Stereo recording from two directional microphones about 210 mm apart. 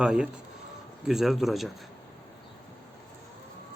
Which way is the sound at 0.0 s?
5° right (ahead or behind).